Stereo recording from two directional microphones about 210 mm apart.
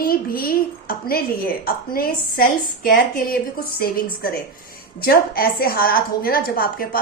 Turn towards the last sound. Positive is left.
turn(degrees=45)  # may be behind; listen again after turning